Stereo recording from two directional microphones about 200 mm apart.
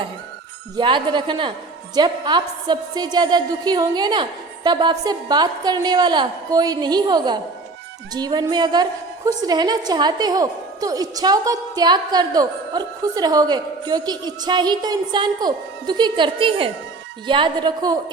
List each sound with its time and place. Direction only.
0.8 s a woman's voice: 25° right (ahead or behind)